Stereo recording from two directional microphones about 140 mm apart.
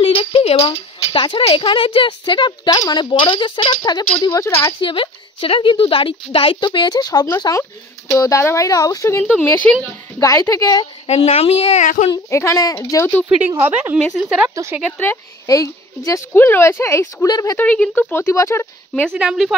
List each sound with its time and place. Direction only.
0.0 s speech: 40° left (ahead or behind)
4.3 s a woman's voice: 20° left (ahead or behind)
4.7 s a woman's voice: 35° left (ahead or behind); by 9.9 s 5° left (ahead or behind)
10.1 s a woman's voice: 20° left (ahead or behind)
11.1 s speech: 45° left (ahead or behind)
11.8 s speech: 65° left (ahead or behind)
12.1 s a woman's voice: 20° left (ahead or behind)
13.5 s a woman's voice: 15° right (ahead or behind)
13.9 s a woman's voice: centre (ahead or behind)
14.5 s speech: 20° right (ahead or behind)
14.8 s speech: 10° left (ahead or behind)
15.4 s a woman's voice: 25° left (ahead or behind)
17.6 s speech: 10° left (ahead or behind)
19.1 s a woman's voice: 5° right (ahead or behind)